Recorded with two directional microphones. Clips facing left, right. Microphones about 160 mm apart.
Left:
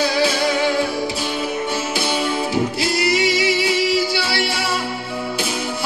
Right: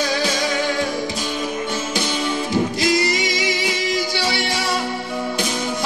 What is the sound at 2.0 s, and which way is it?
Music, 10° left (ahead or behind).